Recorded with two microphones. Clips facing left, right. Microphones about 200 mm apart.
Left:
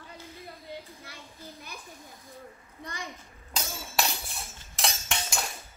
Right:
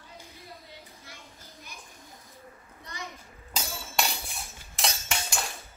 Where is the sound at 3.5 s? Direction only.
Centre (ahead or behind).